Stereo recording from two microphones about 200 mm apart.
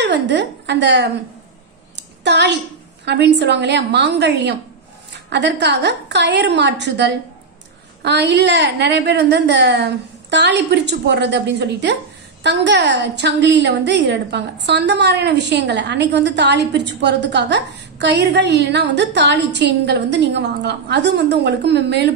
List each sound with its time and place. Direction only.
0.0 s a woman's voice: 60° right (ahead or behind)
2.0 s a sound: 60° right (ahead or behind)
3.1 s a woman's voice: 60° right (ahead or behind)